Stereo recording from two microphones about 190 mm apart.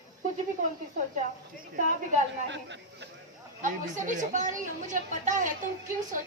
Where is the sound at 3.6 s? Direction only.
40° right (ahead or behind).